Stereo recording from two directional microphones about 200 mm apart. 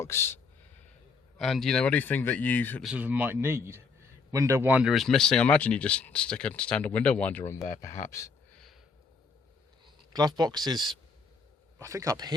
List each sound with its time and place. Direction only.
0.0 s speech: 10° left (ahead or behind)
1.4 s speech: centre (ahead or behind)
2.8 s speech: 5° right (ahead or behind); by 8.3 s 15° left (ahead or behind)
9.8 s speech: 20° right (ahead or behind)